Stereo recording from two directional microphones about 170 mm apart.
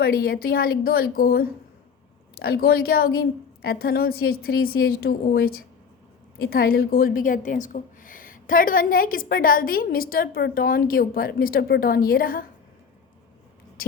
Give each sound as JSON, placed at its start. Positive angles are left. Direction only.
{"t": 0.0, "sound": "a woman's voice", "side_deg": 65}